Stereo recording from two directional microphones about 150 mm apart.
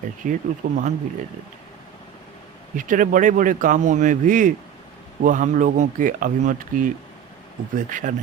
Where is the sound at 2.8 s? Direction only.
60° right (ahead or behind).